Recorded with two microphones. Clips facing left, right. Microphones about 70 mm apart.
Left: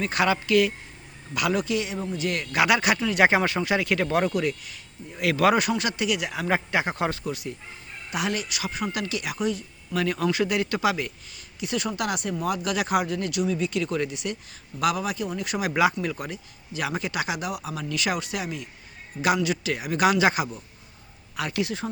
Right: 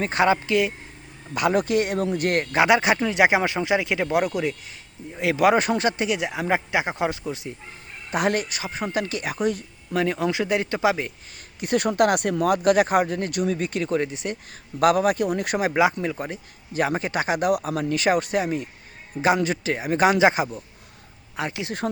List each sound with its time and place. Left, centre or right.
0.0 s speech: right
2.5 s speech: right
8.1 s speech: right
9.9 s speech: right
11.3 s speech: right
14.8 s speech: right
15.6 s speech: right